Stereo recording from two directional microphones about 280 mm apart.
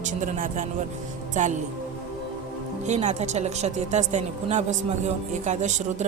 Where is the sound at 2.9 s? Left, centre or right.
Right.